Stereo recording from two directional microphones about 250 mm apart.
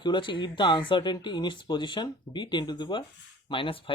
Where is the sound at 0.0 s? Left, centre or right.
Centre.